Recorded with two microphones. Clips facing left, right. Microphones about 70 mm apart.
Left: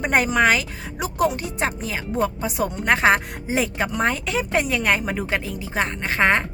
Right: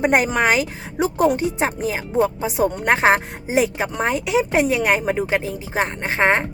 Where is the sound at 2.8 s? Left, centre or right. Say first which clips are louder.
Right 1 dB; right.